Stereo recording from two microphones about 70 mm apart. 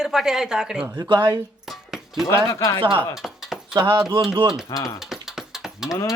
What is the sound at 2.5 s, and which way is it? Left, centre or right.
Speech, left.